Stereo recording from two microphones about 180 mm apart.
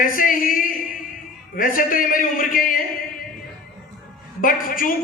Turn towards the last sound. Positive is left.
turn(degrees=50)  # may be behind; listen again after turning